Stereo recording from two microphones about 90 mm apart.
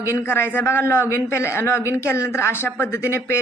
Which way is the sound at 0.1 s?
30° left (ahead or behind).